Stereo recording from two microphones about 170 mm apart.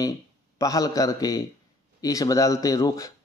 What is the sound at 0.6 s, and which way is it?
A man's voice, 20° left (ahead or behind).